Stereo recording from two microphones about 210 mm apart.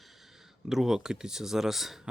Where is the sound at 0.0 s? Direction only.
Centre (ahead or behind).